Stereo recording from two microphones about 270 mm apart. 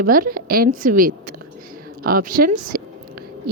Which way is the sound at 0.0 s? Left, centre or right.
Right.